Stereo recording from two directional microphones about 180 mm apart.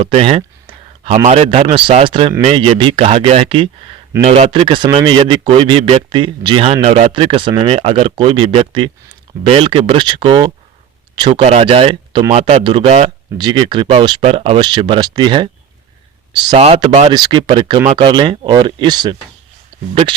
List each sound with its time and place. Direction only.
0.0 s speech: 30° right (ahead or behind)